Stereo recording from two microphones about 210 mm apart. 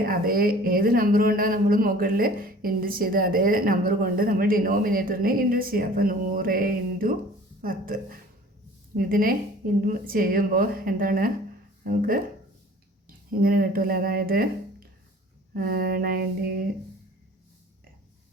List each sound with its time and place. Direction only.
0.0 s speech: 45° right (ahead or behind)
13.4 s speech: 45° right (ahead or behind)